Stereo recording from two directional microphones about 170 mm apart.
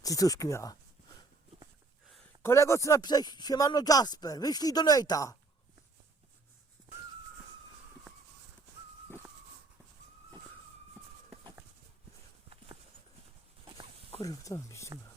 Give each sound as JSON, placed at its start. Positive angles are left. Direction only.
{"t": 0.0, "sound": "speech", "side_deg": 20}
{"t": 2.4, "sound": "speech", "side_deg": 15}
{"t": 14.2, "sound": "speech", "side_deg": 20}